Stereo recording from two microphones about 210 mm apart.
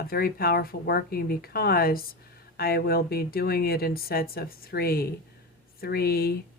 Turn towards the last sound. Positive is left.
turn(degrees=45)  # may be behind; listen again after turning